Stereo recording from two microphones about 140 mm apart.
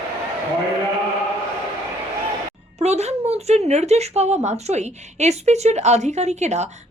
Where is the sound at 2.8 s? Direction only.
50° right (ahead or behind).